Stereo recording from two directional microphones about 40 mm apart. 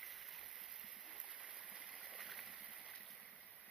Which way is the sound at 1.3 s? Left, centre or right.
Right.